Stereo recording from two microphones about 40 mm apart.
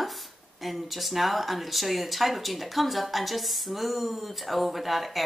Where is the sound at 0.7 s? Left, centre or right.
Centre.